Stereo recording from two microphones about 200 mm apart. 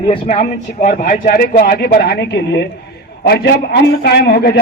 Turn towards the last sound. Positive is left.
turn(degrees=50)  # may be behind; listen again after turning